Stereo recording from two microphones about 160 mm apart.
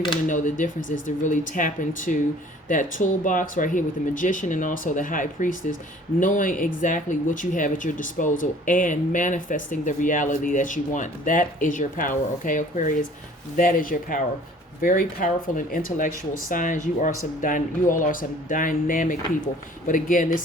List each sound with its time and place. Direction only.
0.3 s speech: 50° left (ahead or behind)